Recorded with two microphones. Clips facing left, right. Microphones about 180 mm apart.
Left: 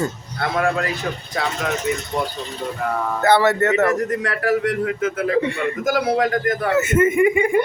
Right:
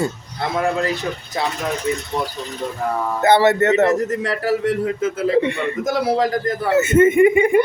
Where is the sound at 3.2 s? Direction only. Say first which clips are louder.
Right 2 dB; 20° right (ahead or behind).